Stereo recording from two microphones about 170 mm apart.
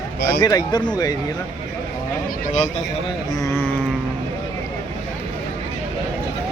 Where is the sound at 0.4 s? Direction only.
25° left (ahead or behind).